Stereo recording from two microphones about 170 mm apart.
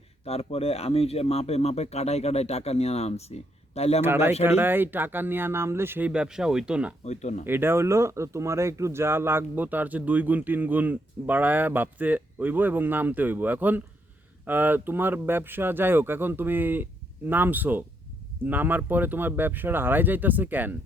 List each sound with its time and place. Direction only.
0.3 s speech: 35° left (ahead or behind)
4.0 s speech: 15° right (ahead or behind)
7.0 s speech: 40° left (ahead or behind)
7.4 s speech: 15° right (ahead or behind)